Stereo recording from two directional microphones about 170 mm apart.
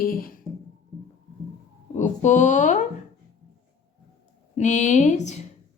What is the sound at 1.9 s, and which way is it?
Speech, 45° left (ahead or behind).